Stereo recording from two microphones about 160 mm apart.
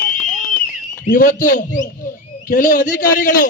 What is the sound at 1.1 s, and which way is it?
A man's voice, 55° left (ahead or behind).